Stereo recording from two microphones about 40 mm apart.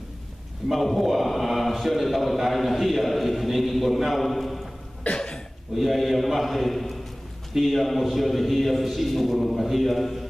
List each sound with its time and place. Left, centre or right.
0.7 s a man's voice: centre
5.1 s cough: centre
5.8 s a man's voice: centre